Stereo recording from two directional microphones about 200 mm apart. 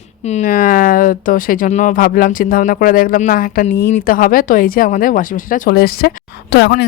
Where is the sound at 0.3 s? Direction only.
40° left (ahead or behind).